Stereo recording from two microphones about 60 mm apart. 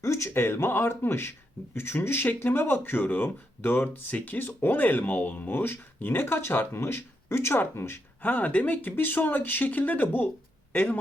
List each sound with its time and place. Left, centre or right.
0.0 s speech: left
8.2 s speech: left